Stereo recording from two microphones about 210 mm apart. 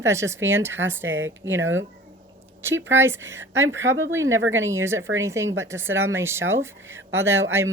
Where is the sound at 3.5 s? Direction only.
65° right (ahead or behind).